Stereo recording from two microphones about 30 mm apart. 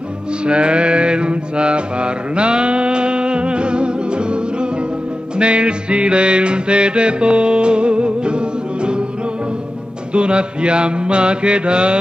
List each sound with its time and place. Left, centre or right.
0.5 s mantra: right
5.4 s music: right
10.1 s mantra: right